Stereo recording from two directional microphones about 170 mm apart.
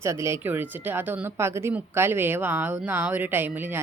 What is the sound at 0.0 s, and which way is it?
A woman's voice, 15° right (ahead or behind).